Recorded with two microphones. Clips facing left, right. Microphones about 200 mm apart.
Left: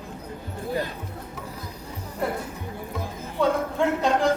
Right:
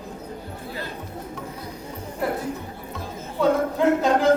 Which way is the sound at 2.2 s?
Centre (ahead or behind).